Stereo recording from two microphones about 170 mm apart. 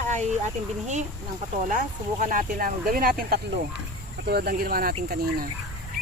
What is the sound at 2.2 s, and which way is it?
Speech, 50° right (ahead or behind).